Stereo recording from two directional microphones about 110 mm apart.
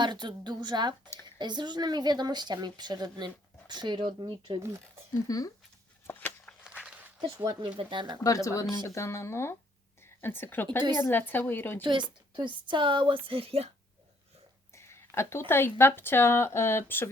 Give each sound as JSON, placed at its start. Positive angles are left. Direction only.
{"t": 0.0, "sound": "a woman's voice", "side_deg": -45}
{"t": 5.3, "sound": "speech", "side_deg": 35}
{"t": 6.1, "sound": "a sound", "side_deg": 15}
{"t": 6.7, "sound": "a sound", "side_deg": -10}
{"t": 7.8, "sound": "a woman's voice", "side_deg": -45}
{"t": 8.2, "sound": "speech", "side_deg": 30}
{"t": 11.8, "sound": "a woman's voice", "side_deg": -45}
{"t": 14.8, "sound": "speech", "side_deg": 25}